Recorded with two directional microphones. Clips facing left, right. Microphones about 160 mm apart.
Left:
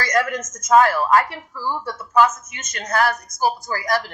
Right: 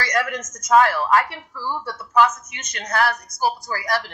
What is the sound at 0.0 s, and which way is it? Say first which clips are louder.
A woman's voice: left 3 dB; 45° left (ahead or behind).